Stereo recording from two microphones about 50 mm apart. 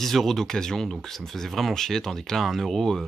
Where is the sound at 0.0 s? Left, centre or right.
Centre.